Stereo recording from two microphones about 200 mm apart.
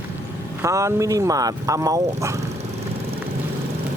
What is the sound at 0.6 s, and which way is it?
Speech, 15° right (ahead or behind).